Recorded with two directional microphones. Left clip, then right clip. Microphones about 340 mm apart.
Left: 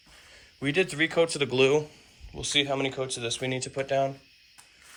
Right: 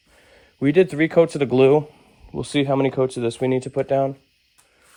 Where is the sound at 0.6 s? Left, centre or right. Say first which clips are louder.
Right 8 dB; centre.